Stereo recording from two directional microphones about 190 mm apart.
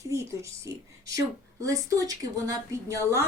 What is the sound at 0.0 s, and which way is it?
A woman's voice, 15° right (ahead or behind).